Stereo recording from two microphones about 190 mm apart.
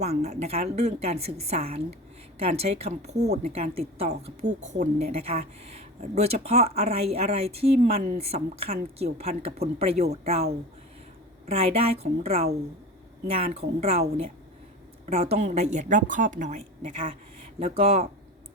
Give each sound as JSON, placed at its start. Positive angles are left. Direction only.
{"t": 0.0, "sound": "speech", "side_deg": -35}
{"t": 11.4, "sound": "speech", "side_deg": -30}
{"t": 15.0, "sound": "speech", "side_deg": -35}